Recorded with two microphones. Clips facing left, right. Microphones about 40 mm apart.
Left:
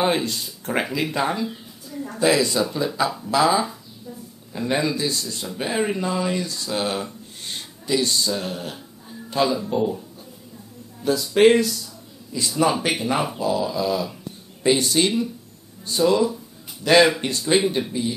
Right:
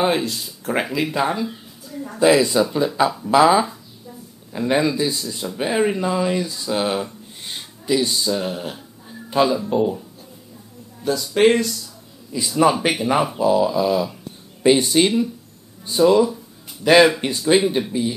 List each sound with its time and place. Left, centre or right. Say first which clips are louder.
0.0 s speech: right 2 dB; centre
12.3 s speech: right 4 dB; centre